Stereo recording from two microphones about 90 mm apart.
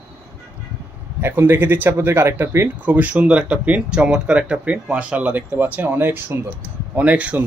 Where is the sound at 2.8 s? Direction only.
15° right (ahead or behind).